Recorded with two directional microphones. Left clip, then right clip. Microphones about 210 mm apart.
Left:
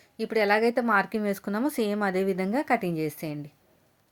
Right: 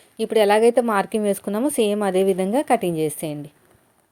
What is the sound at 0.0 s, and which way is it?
A woman's voice, 10° right (ahead or behind).